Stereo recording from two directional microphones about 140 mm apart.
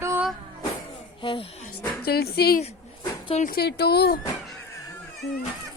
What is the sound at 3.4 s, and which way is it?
Speech, 80° left.